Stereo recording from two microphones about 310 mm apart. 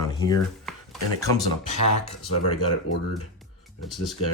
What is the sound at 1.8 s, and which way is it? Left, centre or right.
Speech, left.